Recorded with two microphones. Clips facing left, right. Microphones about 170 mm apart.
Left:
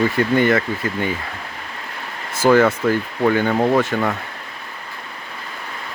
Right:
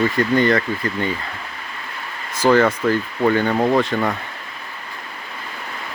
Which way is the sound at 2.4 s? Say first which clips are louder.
Left 1 dB; 10° left (ahead or behind).